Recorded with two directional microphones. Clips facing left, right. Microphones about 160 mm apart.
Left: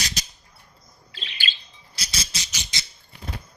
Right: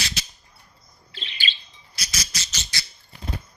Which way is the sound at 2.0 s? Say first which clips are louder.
Even; 30° left (ahead or behind).